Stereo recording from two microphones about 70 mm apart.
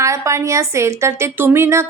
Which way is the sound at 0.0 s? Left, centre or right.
Right.